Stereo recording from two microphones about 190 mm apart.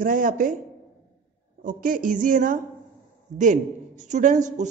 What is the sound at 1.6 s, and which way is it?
A man's voice, 45° right (ahead or behind).